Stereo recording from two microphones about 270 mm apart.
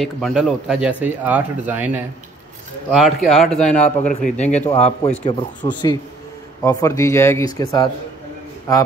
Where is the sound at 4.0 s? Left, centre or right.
Left.